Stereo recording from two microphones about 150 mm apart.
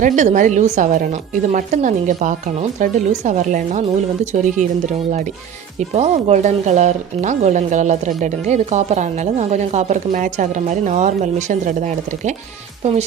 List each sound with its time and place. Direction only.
0.0 s a woman's voice: 55° right (ahead or behind)
5.9 s speech: 45° right (ahead or behind)